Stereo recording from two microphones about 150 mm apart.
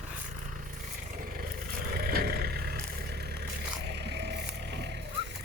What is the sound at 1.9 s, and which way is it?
Vehicle, 85° right.